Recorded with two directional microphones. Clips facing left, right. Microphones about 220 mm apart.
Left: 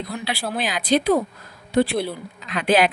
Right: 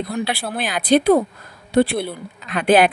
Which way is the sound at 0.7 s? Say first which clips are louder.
Right 5 dB; 55° right (ahead or behind).